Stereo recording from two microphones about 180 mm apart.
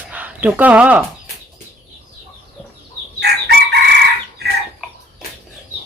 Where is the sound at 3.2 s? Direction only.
65° right (ahead or behind).